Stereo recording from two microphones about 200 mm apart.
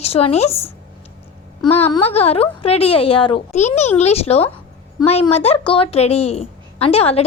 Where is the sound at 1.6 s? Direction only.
30° left (ahead or behind).